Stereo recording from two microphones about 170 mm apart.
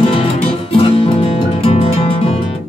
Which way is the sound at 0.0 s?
35° left (ahead or behind).